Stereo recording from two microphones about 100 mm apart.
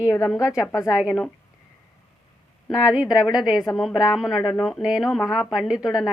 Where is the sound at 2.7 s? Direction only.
5° right (ahead or behind).